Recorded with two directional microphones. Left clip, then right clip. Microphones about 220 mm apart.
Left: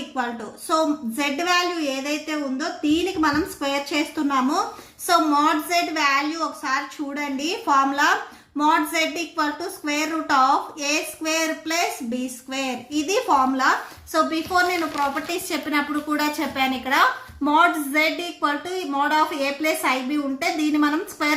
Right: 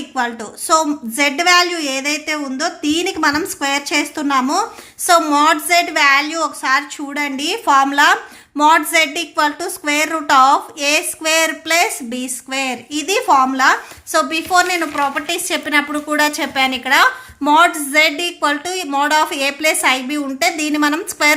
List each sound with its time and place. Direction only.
0.7 s a woman's voice: 45° right (ahead or behind)